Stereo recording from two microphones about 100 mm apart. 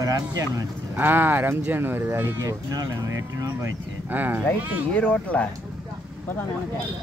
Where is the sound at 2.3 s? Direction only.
35° right (ahead or behind).